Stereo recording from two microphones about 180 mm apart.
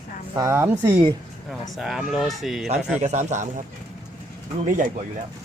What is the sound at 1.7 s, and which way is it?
Speech, centre (ahead or behind).